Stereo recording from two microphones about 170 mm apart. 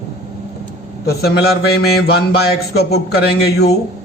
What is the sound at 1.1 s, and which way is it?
A man's voice, 70° left (ahead or behind).